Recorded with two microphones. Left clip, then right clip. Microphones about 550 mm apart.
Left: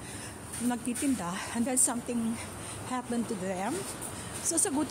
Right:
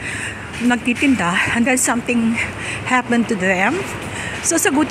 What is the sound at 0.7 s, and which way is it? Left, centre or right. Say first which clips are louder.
Speech: right 15 dB; left.